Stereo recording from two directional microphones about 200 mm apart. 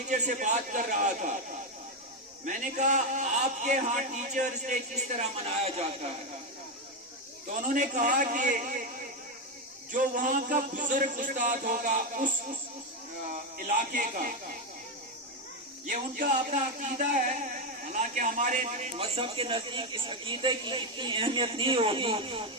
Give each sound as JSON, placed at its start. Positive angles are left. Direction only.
{"t": 0.1, "sound": "a man's voice", "side_deg": -40}
{"t": 2.4, "sound": "a man's voice", "side_deg": -40}
{"t": 7.5, "sound": "a man's voice", "side_deg": -40}
{"t": 9.9, "sound": "a man's voice", "side_deg": -40}
{"t": 15.9, "sound": "a man's voice", "side_deg": -40}
{"t": 17.9, "sound": "a man's voice", "side_deg": -40}